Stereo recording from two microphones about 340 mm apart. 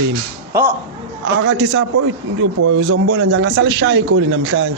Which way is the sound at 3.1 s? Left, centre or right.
Right.